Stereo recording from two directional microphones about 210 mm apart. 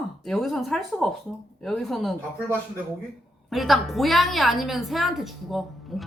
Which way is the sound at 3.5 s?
Centre (ahead or behind).